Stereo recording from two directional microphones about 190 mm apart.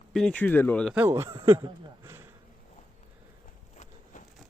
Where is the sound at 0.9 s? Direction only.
10° right (ahead or behind).